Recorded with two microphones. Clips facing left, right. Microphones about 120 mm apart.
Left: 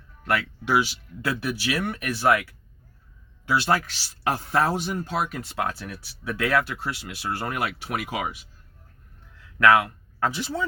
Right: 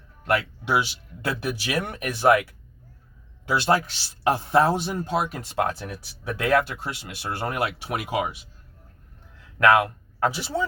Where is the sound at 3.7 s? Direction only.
25° right (ahead or behind).